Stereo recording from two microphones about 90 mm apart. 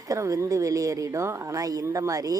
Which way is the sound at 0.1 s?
35° right (ahead or behind).